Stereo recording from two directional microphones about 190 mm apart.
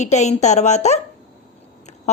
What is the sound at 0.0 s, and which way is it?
A woman's voice, 35° left (ahead or behind).